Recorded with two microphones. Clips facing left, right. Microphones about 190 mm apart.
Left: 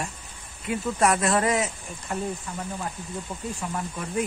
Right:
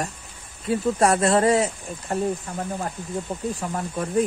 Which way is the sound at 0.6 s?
35° right (ahead or behind).